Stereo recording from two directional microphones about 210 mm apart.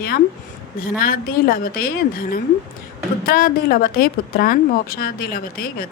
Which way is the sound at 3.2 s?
45° left (ahead or behind).